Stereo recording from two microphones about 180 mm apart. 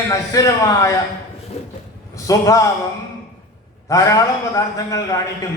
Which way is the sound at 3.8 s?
20° left (ahead or behind).